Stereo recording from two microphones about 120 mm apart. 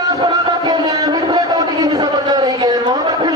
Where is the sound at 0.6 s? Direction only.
35° right (ahead or behind).